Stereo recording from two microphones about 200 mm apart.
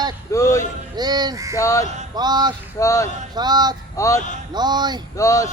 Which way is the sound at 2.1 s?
20° right (ahead or behind).